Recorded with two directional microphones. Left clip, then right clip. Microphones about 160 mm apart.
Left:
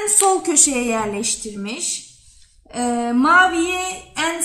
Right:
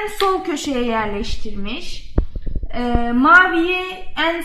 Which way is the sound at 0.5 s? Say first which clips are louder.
Left 2 dB; 50° left (ahead or behind).